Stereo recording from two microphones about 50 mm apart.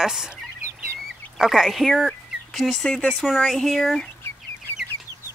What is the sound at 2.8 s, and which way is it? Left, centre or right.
Speech, centre.